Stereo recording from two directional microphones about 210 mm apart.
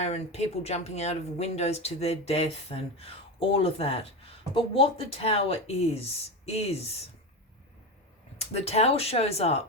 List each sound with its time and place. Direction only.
0.0 s speech: 30° left (ahead or behind)
8.4 s speech: 30° left (ahead or behind)